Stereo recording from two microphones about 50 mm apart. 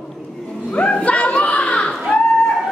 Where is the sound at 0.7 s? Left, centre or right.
Left.